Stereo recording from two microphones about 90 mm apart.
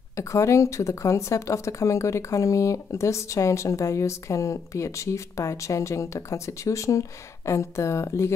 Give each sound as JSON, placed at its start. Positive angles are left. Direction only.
{"t": 0.1, "sound": "speech", "side_deg": 35}